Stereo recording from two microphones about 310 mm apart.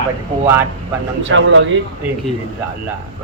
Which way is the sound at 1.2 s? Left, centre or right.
Right.